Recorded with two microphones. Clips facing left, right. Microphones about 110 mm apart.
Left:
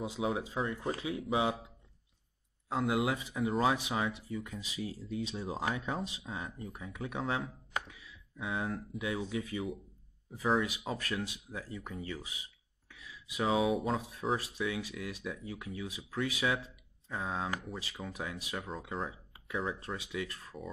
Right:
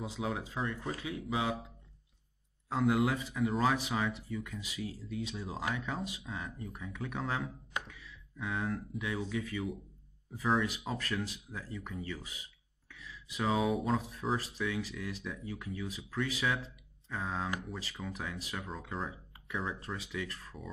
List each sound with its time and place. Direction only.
0.0 s speech: 15° left (ahead or behind)
0.7 s speech: 25° left (ahead or behind)
2.9 s speech: 15° left (ahead or behind)
3.7 s speech: 15° left (ahead or behind)
6.7 s speech: 10° left (ahead or behind)
7.9 s a sound: 10° left (ahead or behind)
8.9 s speech: 15° left (ahead or behind)
10.3 s speech: 10° left (ahead or behind)
12.9 s a sound: 15° left (ahead or behind)
13.5 s speech: centre (ahead or behind)
14.7 s speech: 15° left (ahead or behind)
20.0 s speech: 15° left (ahead or behind)